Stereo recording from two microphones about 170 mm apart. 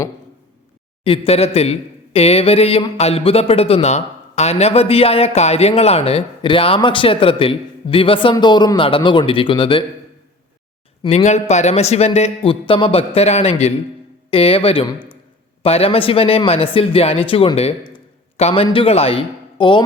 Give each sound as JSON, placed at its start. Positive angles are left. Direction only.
{"t": 1.0, "sound": "speech", "side_deg": 35}
{"t": 11.0, "sound": "speech", "side_deg": 40}